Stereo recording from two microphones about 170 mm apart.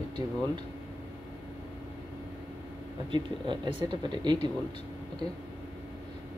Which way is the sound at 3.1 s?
30° right (ahead or behind).